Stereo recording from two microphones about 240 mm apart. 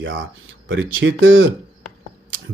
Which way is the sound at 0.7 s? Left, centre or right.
Right.